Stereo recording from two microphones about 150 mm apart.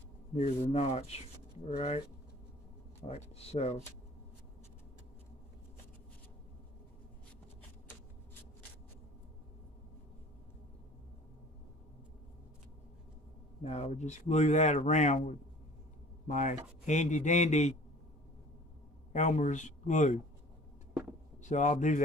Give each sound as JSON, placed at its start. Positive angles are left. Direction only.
{"t": 0.3, "sound": "a man's voice", "side_deg": 45}
{"t": 3.1, "sound": "a man's voice", "side_deg": 45}
{"t": 13.6, "sound": "a man's voice", "side_deg": 45}
{"t": 19.1, "sound": "a man's voice", "side_deg": 55}
{"t": 21.4, "sound": "speech", "side_deg": 55}